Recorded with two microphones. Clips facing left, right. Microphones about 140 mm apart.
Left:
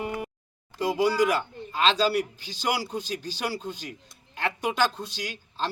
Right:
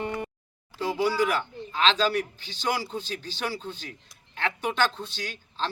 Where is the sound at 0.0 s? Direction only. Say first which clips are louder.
Even; 10° left (ahead or behind).